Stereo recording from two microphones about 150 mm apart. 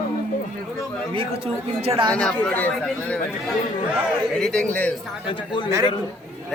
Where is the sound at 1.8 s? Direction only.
40° right (ahead or behind).